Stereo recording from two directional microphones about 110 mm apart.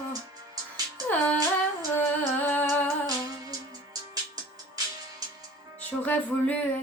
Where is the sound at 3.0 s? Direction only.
35° right (ahead or behind).